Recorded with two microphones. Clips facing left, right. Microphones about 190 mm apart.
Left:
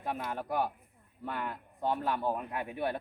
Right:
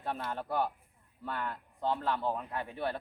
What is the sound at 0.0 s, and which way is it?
A man's voice, 10° left (ahead or behind).